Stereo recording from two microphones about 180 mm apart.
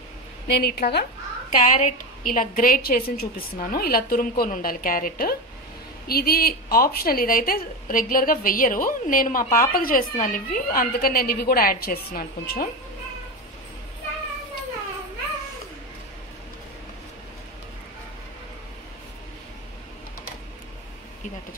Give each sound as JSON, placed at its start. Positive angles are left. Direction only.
{"t": 0.5, "sound": "a woman's voice", "side_deg": 60}
{"t": 1.5, "sound": "a woman's voice", "side_deg": 45}